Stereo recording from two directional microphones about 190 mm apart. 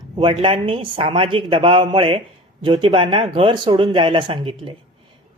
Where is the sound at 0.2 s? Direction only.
30° right (ahead or behind).